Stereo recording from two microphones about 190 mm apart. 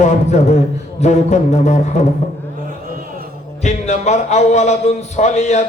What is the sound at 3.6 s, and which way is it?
Speech, 40° left (ahead or behind).